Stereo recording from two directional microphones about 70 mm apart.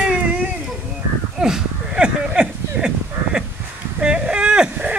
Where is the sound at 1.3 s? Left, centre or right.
Centre.